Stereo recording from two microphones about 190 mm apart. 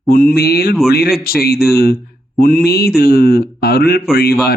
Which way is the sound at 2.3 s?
50° left (ahead or behind).